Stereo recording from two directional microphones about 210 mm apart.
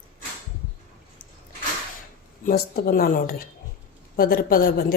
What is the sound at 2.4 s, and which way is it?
A woman's voice, 45° left (ahead or behind).